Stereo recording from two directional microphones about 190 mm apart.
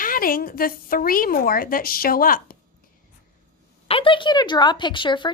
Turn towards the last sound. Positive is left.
turn(degrees=25)  # may be behind; listen again after turning